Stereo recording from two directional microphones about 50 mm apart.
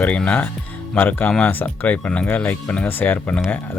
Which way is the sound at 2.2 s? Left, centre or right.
Left.